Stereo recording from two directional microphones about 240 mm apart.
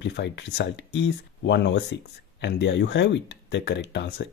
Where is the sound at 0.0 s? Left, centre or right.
Left.